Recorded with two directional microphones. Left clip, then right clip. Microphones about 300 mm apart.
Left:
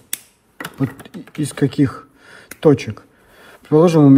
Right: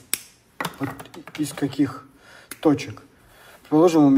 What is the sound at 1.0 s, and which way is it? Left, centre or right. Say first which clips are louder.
Speech: left 3 dB; left.